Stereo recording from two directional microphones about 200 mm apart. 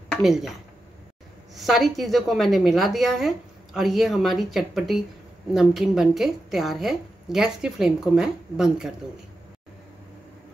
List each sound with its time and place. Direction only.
0.1 s speech: centre (ahead or behind)
1.5 s a woman's voice: centre (ahead or behind)